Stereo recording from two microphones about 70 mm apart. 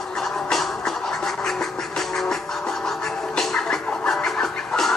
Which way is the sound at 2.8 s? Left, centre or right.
Centre.